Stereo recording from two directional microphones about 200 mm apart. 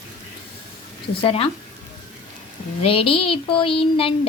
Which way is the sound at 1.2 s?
30° left (ahead or behind).